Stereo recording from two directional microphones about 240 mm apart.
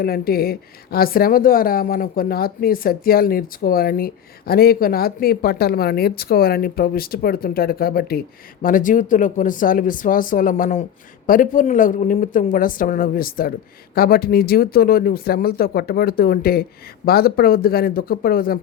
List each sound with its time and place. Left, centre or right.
0.0 s speech: left